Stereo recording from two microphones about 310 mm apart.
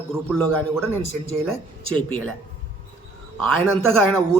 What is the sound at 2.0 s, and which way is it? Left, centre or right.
Speech, centre.